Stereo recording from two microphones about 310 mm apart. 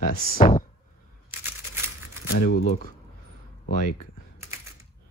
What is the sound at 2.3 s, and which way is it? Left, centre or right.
Speech, left.